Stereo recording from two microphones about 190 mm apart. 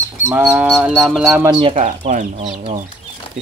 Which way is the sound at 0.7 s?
5° right (ahead or behind).